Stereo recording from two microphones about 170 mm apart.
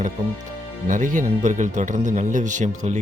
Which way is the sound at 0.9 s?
50° right (ahead or behind).